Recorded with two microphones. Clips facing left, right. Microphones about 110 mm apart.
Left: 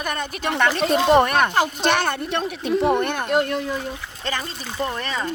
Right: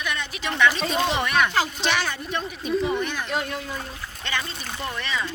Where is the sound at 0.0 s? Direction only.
45° left (ahead or behind); by 3.6 s 60° left (ahead or behind).